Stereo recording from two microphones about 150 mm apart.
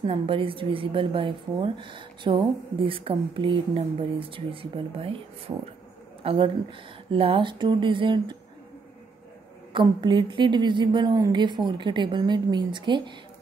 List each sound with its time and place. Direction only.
0.0 s a woman's voice: 35° right (ahead or behind)
5.5 s speech: 25° right (ahead or behind)
6.2 s a woman's voice: 35° right (ahead or behind)
9.7 s a woman's voice: 30° right (ahead or behind)